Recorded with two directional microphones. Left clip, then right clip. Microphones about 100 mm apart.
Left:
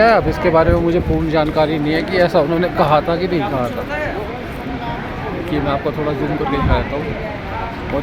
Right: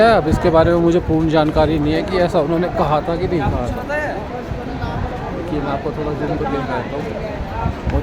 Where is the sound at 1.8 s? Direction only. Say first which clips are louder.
Left 2 dB; 30° right (ahead or behind).